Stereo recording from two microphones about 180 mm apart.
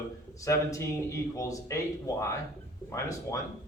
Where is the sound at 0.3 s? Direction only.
20° left (ahead or behind).